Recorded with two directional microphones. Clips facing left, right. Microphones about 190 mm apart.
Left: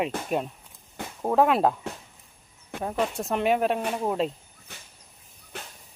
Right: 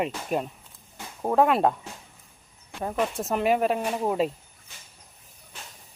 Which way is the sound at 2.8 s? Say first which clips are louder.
Even; centre (ahead or behind).